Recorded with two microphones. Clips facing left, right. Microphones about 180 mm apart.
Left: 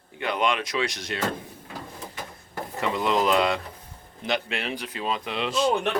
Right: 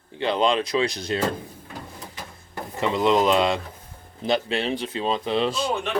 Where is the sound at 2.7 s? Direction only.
25° right (ahead or behind).